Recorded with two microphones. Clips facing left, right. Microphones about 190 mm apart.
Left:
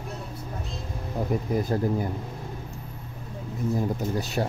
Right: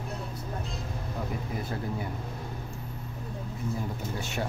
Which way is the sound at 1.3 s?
45° left (ahead or behind).